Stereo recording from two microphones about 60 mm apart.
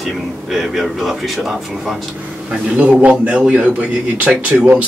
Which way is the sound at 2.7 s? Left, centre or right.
Right.